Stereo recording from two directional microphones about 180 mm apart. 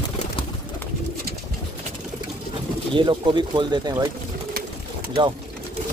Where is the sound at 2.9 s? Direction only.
25° right (ahead or behind).